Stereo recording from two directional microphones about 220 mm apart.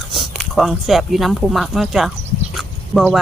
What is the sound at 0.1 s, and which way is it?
Speech, centre (ahead or behind).